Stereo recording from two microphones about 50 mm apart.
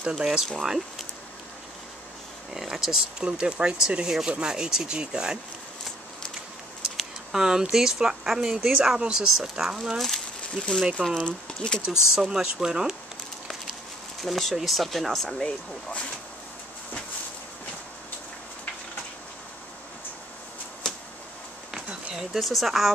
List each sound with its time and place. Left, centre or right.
0.0 s speech: centre
2.5 s speech: centre
7.0 s a sound: centre
7.7 s speech: centre
9.9 s a sound: centre
11.1 s speech: centre
12.2 s speech: centre
14.2 s speech: centre
15.2 s speech: centre
22.1 s speech: centre